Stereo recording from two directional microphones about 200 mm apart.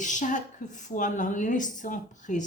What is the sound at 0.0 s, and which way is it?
A woman's voice, 40° left (ahead or behind).